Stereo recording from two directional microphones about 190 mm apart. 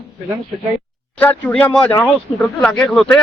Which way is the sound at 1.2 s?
10° left (ahead or behind).